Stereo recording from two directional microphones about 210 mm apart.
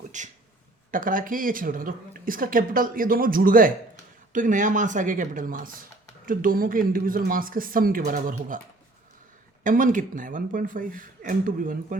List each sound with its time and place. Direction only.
0.1 s a woman's voice: 35° right (ahead or behind)
9.6 s a woman's voice: 40° right (ahead or behind)